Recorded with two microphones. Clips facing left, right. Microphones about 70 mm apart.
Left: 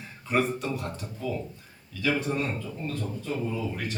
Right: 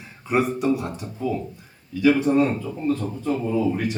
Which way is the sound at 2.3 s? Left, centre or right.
Right.